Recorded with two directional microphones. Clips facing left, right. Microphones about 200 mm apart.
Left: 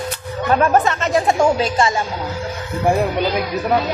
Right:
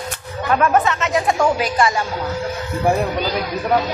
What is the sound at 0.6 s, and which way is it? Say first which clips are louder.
Speech: even; 35° left (ahead or behind).